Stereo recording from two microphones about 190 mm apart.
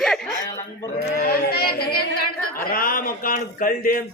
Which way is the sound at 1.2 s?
50° left (ahead or behind).